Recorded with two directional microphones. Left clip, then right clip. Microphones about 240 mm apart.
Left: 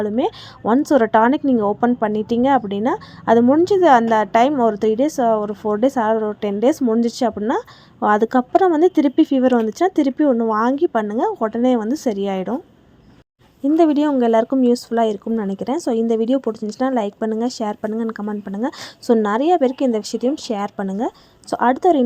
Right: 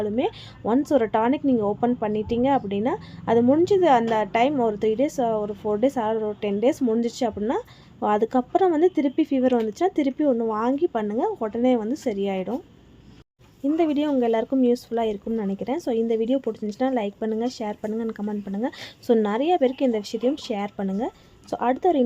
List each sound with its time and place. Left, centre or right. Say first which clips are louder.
0.0 s a woman's voice: left 5 dB; centre
13.7 s a woman's voice: left 7 dB; centre